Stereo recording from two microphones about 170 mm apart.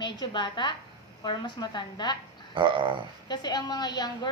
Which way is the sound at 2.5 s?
30° right (ahead or behind).